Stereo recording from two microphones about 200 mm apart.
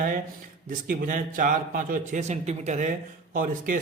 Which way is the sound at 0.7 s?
45° right (ahead or behind).